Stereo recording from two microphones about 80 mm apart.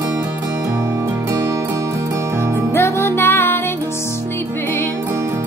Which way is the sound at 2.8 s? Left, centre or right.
Left.